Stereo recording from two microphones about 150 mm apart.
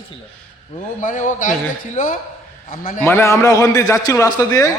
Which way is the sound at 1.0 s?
60° left (ahead or behind).